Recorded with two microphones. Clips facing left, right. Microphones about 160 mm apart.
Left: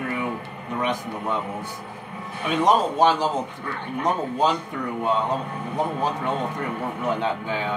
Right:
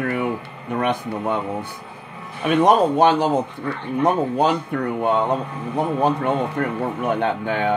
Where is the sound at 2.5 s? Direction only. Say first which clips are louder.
Right 5 dB; 60° right (ahead or behind).